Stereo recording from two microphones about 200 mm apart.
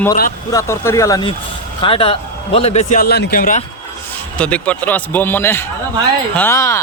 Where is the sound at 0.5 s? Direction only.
15° left (ahead or behind).